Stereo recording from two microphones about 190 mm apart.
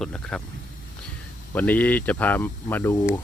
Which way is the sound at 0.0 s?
5° left (ahead or behind).